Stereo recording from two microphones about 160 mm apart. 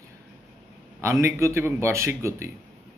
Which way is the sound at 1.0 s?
15° right (ahead or behind).